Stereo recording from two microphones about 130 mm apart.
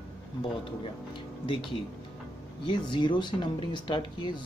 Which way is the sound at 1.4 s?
40° left (ahead or behind).